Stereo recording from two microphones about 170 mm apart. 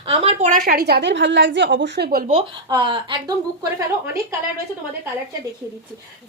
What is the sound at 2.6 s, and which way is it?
A woman's voice, 25° right (ahead or behind).